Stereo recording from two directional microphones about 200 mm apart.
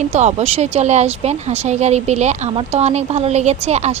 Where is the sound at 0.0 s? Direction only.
35° right (ahead or behind).